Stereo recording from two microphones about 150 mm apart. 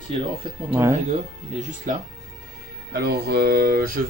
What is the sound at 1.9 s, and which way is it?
Speech, 65° right (ahead or behind).